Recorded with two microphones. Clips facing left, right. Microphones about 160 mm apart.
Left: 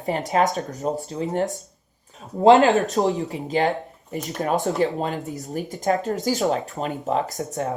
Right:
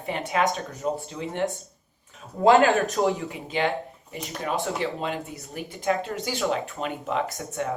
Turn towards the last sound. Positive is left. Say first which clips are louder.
# left 3 dB
turn(degrees=40)  # may be behind; listen again after turning